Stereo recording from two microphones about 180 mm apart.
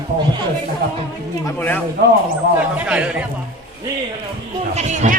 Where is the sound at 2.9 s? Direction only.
5° right (ahead or behind).